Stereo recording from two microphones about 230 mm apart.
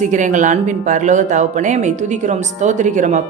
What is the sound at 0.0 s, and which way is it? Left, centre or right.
Speech, right.